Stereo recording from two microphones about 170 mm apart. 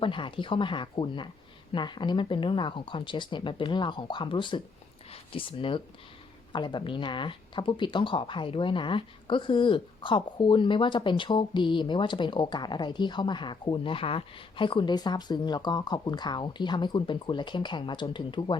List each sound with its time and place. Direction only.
0.0 s speech: 30° left (ahead or behind)